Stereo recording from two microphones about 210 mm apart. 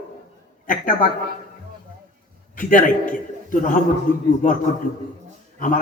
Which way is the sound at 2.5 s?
40° left (ahead or behind).